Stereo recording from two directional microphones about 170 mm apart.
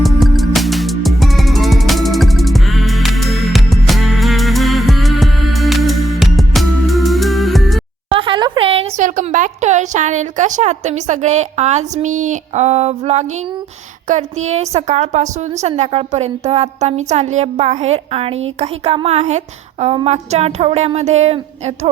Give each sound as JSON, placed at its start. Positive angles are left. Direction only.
{"t": 0.0, "sound": "music", "side_deg": 0}
{"t": 8.1, "sound": "a sound", "side_deg": -30}
{"t": 9.0, "sound": "a woman's voice", "side_deg": -50}